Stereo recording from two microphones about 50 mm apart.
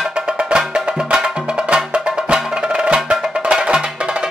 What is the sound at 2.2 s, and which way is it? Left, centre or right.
Music, centre.